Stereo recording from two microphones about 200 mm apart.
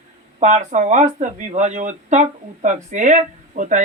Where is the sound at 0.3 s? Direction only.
35° right (ahead or behind).